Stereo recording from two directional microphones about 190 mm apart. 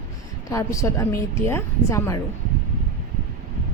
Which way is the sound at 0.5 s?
15° left (ahead or behind).